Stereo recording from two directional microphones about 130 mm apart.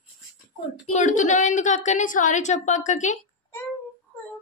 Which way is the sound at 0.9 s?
65° left (ahead or behind).